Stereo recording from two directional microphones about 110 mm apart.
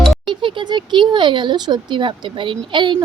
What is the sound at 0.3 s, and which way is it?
A woman's voice, 45° right (ahead or behind).